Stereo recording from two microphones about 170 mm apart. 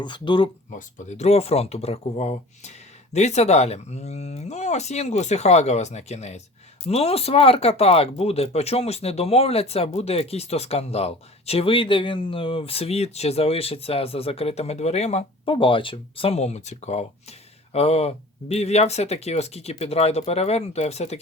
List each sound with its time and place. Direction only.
0.0 s speech: 30° left (ahead or behind)
0.7 s speech: 50° left (ahead or behind)